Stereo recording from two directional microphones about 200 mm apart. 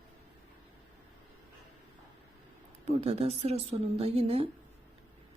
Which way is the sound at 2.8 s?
30° right (ahead or behind).